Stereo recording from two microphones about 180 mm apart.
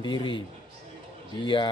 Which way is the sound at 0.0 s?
25° left (ahead or behind).